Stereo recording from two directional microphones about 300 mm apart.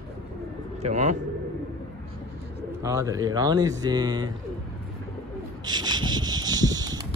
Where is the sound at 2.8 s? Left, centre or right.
Centre.